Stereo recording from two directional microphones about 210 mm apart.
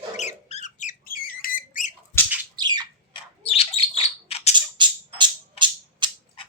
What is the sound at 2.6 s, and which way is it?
Squawk, 20° right (ahead or behind).